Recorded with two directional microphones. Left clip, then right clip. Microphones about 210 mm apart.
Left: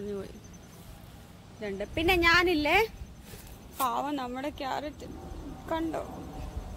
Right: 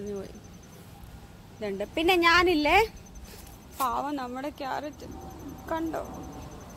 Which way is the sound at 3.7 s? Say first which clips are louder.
Right 1 dB; 5° left (ahead or behind).